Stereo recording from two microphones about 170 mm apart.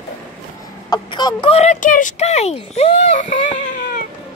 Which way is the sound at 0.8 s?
25° left (ahead or behind).